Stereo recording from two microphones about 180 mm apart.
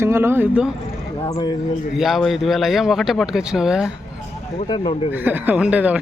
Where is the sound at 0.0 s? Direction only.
15° right (ahead or behind).